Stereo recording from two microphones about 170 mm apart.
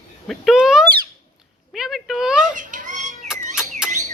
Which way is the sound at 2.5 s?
50° right (ahead or behind).